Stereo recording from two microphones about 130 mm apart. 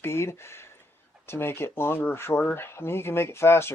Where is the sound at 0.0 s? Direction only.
20° left (ahead or behind).